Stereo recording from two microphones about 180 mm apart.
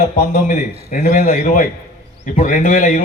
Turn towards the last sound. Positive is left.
turn(degrees=50)  # may be behind; listen again after turning